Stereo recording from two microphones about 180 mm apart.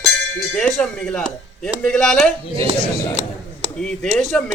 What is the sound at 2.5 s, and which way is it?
Speech, 30° right (ahead or behind).